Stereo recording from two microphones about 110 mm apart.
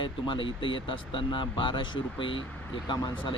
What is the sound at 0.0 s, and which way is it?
Speech, 50° left (ahead or behind).